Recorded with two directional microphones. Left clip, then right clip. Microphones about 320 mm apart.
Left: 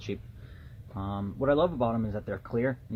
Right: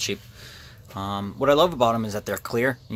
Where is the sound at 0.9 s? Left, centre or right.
Centre.